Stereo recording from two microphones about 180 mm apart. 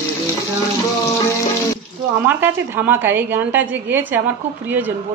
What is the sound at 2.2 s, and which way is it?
Speech, 10° right (ahead or behind).